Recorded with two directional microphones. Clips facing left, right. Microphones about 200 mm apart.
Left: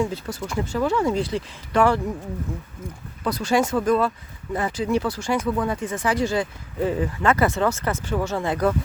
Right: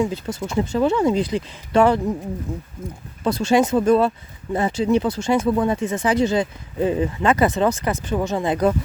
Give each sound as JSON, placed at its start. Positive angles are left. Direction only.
{"t": 0.0, "sound": "speech", "side_deg": -20}
{"t": 3.2, "sound": "speech", "side_deg": -25}